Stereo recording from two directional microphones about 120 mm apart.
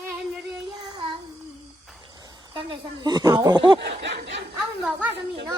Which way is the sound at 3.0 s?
35° right (ahead or behind).